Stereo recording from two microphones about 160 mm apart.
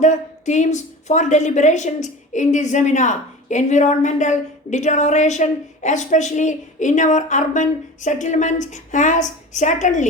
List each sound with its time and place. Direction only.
0.0 s a woman's voice: 50° left (ahead or behind)